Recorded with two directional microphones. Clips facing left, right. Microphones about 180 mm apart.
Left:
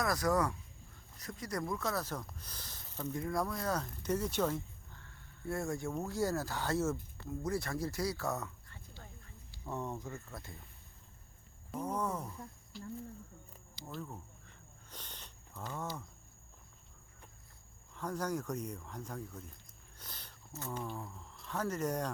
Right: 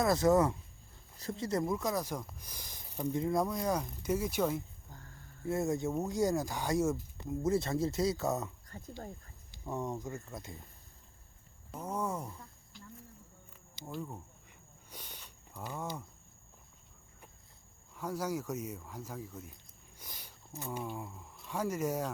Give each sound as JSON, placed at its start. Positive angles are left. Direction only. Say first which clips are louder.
{"t": 0.0, "sound": "speech", "louder": "right 5 dB", "side_deg": -25}
{"t": 4.9, "sound": "a sound", "louder": "right 4 dB", "side_deg": -40}
{"t": 5.5, "sound": "speech", "louder": "right 5 dB", "side_deg": -20}
{"t": 8.6, "sound": "speech", "louder": "right 11 dB", "side_deg": -40}
{"t": 9.5, "sound": "speech", "louder": "right 3 dB", "side_deg": -15}
{"t": 11.7, "sound": "speech", "louder": "even", "side_deg": -10}
{"t": 13.9, "sound": "a sound", "louder": "right 3 dB", "side_deg": -10}
{"t": 17.9, "sound": "speech", "louder": "right 1 dB", "side_deg": -10}